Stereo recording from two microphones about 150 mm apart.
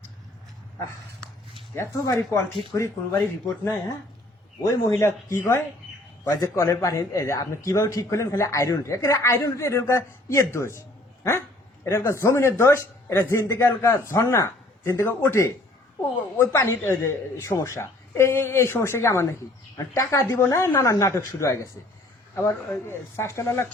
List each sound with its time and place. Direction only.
1.7 s a woman's voice: 20° left (ahead or behind)